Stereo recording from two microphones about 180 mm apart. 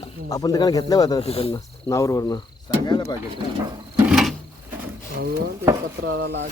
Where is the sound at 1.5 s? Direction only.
15° left (ahead or behind).